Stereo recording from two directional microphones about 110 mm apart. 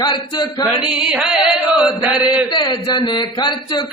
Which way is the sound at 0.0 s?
40° left (ahead or behind).